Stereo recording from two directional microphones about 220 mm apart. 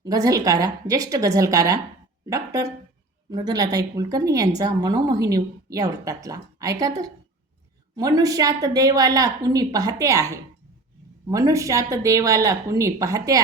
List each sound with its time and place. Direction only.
0.0 s a woman's voice: 15° right (ahead or behind)